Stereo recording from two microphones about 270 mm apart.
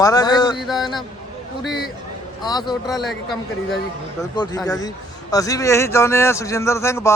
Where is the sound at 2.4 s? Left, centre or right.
Centre.